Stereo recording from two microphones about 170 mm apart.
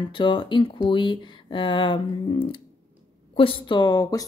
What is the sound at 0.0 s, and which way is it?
Speech, 30° left (ahead or behind).